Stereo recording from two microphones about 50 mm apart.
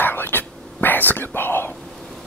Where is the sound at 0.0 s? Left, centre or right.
Left.